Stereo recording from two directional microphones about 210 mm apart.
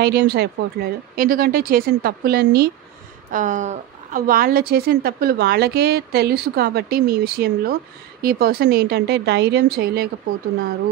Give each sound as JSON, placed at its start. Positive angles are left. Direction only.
{"t": 0.0, "sound": "a woman's voice", "side_deg": -50}